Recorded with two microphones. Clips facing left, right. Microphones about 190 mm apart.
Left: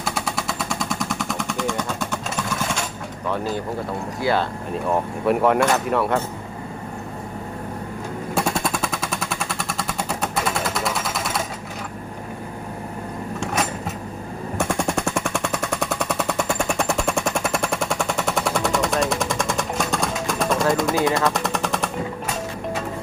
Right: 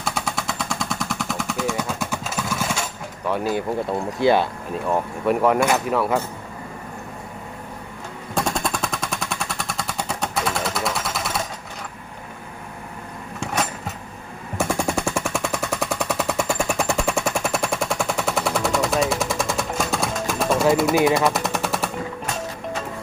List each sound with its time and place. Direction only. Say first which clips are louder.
0.0 s machine gun: even; centre (ahead or behind)
3.2 s speech: right 2 dB; 10° right (ahead or behind)
4.7 s speech: left 1 dB; centre (ahead or behind)
8.4 s machine gun: even; 5° left (ahead or behind)
13.4 s a sound: even; centre (ahead or behind)
14.6 s machine gun: right 1 dB; centre (ahead or behind)